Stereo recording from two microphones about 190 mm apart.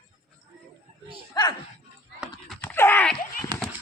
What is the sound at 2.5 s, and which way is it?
Dog, 10° left (ahead or behind).